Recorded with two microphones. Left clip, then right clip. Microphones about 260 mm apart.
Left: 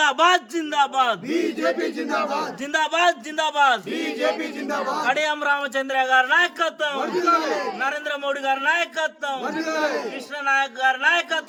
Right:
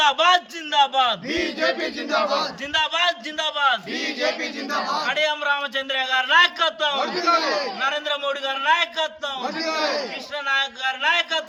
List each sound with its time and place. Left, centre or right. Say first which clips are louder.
0.0 s a man's voice: even; centre
2.0 s battle cry: right 4 dB; centre
2.4 s a man's voice: even; left
3.9 s a man's voice: even; centre
4.9 s a man's voice: left 1 dB; left